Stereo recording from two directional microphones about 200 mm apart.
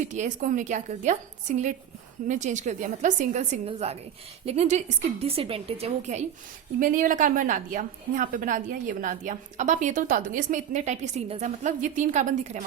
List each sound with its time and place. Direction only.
0.0 s a woman's voice: 40° right (ahead or behind)